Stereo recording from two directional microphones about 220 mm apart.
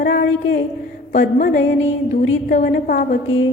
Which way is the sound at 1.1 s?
35° left (ahead or behind).